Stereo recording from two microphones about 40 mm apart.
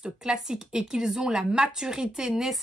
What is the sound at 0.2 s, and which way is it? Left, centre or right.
Speech, centre.